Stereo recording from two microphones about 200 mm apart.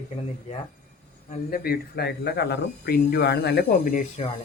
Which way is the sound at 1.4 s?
50° left (ahead or behind).